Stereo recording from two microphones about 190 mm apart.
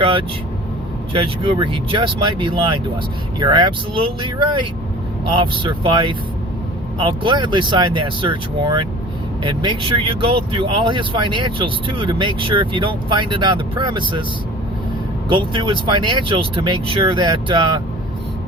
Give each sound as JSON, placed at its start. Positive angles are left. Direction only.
{"t": 0.0, "sound": "speech", "side_deg": -30}
{"t": 5.3, "sound": "speech", "side_deg": -25}
{"t": 15.3, "sound": "speech", "side_deg": -25}